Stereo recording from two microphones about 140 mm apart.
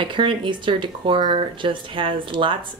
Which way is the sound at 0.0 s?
35° right (ahead or behind).